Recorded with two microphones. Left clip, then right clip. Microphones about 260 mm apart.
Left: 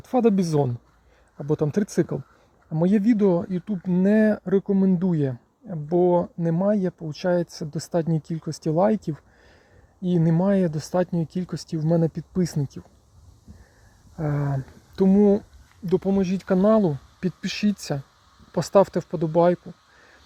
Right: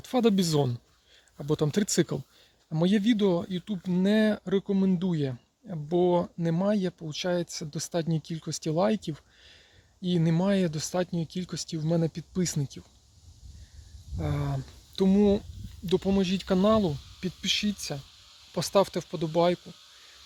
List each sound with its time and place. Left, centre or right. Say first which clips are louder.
0.0 s speech: left 4 dB; centre
14.2 s speech: left 5 dB; centre
17.2 s speech: right 1 dB; centre